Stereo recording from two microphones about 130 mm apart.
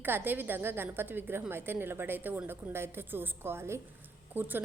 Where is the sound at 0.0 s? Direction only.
15° right (ahead or behind).